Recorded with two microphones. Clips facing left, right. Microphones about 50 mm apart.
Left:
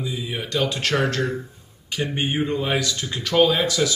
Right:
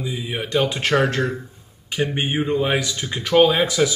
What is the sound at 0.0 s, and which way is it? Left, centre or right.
Speech, right.